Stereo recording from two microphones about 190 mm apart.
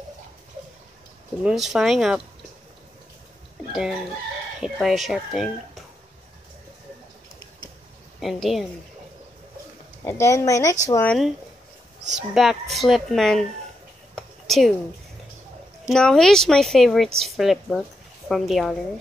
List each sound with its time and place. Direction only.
1.4 s a woman's voice: centre (ahead or behind)
4.6 s a woman's voice: centre (ahead or behind)
8.2 s a woman's voice: centre (ahead or behind)
10.0 s speech: 15° left (ahead or behind)
11.1 s a woman's voice: centre (ahead or behind)
14.1 s a sound: centre (ahead or behind)
15.9 s a woman's voice: 5° left (ahead or behind)